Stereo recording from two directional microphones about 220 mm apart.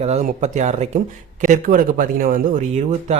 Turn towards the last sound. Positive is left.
turn(degrees=-35)  # may be behind; listen again after turning